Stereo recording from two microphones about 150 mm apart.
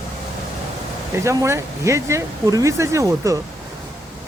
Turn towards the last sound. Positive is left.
turn(degrees=-20)  # may be behind; listen again after turning